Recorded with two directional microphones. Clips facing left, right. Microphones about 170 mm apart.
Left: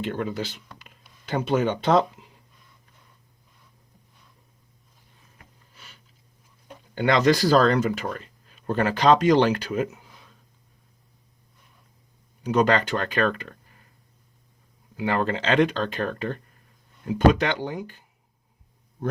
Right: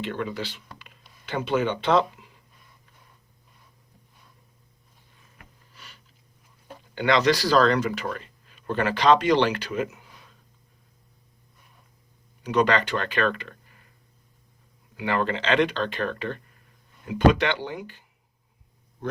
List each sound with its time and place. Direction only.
0.0 s speech: 40° left (ahead or behind)
6.9 s speech: 45° left (ahead or behind)
12.4 s speech: 45° left (ahead or behind)
14.9 s speech: 45° left (ahead or behind)